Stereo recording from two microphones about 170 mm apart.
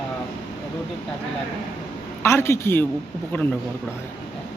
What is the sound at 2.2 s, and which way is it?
Speech, 15° left (ahead or behind).